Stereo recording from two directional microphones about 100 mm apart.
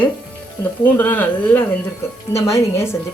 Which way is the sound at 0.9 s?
20° left (ahead or behind).